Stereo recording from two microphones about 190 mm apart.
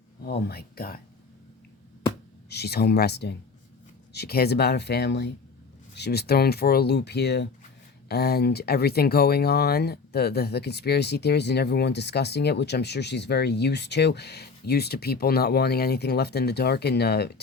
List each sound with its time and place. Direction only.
0.3 s speech: 55° left (ahead or behind)
2.5 s speech: 60° left (ahead or behind)